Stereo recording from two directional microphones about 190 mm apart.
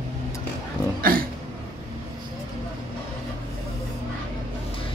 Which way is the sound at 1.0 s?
50° right (ahead or behind).